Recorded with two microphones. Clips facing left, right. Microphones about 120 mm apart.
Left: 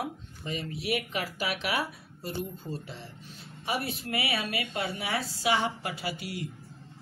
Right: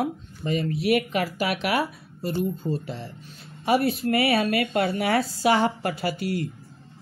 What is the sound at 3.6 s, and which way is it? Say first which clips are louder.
Speech: right 11 dB; 60° right (ahead or behind).